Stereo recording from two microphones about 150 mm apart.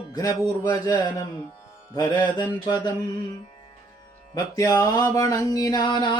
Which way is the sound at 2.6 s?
30° left (ahead or behind).